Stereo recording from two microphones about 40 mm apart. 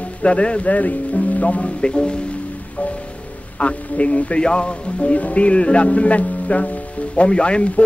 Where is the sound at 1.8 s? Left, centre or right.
Left.